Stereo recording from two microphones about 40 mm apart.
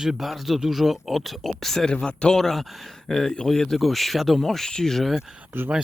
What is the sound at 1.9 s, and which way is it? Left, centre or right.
Speech, left.